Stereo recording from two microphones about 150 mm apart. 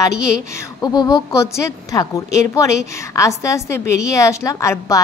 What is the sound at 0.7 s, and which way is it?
A woman's voice, 30° left (ahead or behind).